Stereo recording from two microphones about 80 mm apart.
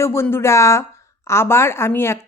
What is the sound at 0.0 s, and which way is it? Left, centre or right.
Speech, left.